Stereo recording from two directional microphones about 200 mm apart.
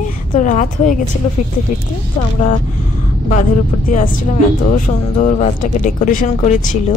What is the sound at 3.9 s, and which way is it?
A woman's voice, 40° left (ahead or behind).